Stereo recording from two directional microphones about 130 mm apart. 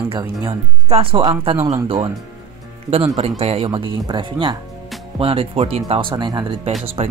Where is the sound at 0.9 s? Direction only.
45° right (ahead or behind).